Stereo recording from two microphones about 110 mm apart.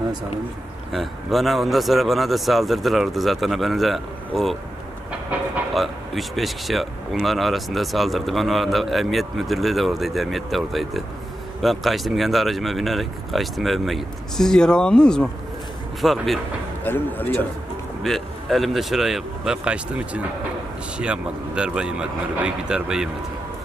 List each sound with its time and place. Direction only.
0.9 s speech: centre (ahead or behind)
5.8 s speech: centre (ahead or behind)
16.8 s speech: 20° left (ahead or behind)
18.0 s speech: centre (ahead or behind)